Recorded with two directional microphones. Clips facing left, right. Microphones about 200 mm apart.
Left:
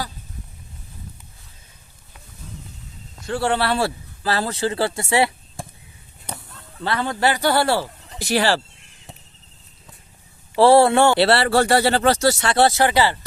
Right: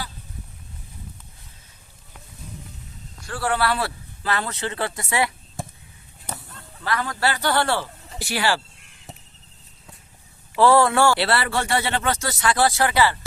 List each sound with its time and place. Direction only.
3.2 s speech: 25° left (ahead or behind)
6.8 s a man's voice: 30° left (ahead or behind); by 7.9 s 10° left (ahead or behind)
8.2 s a man's voice: 40° left (ahead or behind)
10.5 s a man's voice: 35° left (ahead or behind); by 13.1 s 20° left (ahead or behind)